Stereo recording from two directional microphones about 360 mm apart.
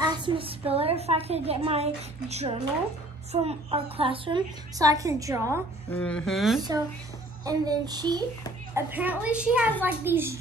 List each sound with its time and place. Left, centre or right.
0.0 s a woman's voice: centre
5.9 s a child's voice: centre
7.4 s a woman's voice: centre